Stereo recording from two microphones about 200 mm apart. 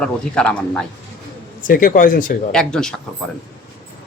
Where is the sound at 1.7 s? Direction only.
45° left (ahead or behind).